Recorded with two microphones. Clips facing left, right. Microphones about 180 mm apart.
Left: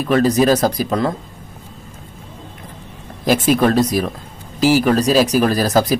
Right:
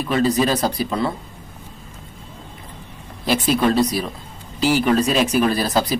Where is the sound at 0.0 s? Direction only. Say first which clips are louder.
Left 4 dB; 45° left (ahead or behind).